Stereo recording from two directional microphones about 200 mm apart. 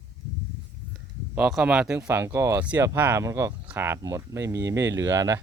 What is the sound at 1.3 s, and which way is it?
Speech, 5° right (ahead or behind).